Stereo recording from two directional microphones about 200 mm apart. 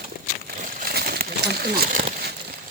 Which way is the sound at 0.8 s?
50° right (ahead or behind).